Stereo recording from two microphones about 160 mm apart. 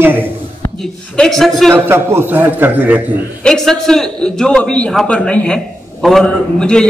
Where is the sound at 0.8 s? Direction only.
Centre (ahead or behind).